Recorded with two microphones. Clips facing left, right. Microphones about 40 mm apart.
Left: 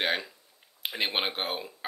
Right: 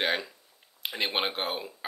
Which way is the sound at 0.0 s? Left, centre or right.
Centre.